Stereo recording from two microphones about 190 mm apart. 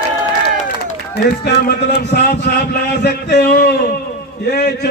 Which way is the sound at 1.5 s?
60° left (ahead or behind).